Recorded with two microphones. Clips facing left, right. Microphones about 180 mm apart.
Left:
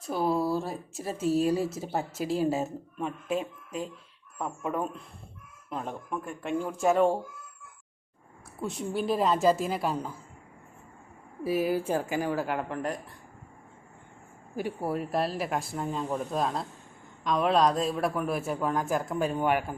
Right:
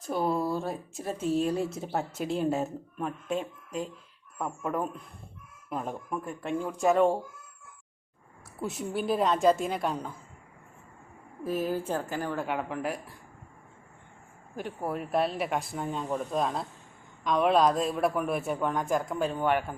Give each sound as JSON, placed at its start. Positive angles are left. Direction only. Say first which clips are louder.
{"t": 0.0, "sound": "speech", "louder": "left 1 dB", "side_deg": 0}
{"t": 8.6, "sound": "speech", "louder": "left 1 dB", "side_deg": 0}
{"t": 11.4, "sound": "a woman's voice", "louder": "left 3 dB", "side_deg": 10}
{"t": 14.5, "sound": "speech", "louder": "left 3 dB", "side_deg": 5}